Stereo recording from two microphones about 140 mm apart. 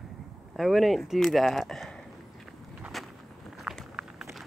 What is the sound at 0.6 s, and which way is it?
Speech, centre (ahead or behind).